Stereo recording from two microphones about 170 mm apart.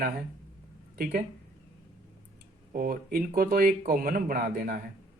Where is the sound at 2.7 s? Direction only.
60° right (ahead or behind).